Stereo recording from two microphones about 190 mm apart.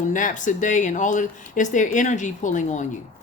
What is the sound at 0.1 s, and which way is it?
Speech, 45° left (ahead or behind).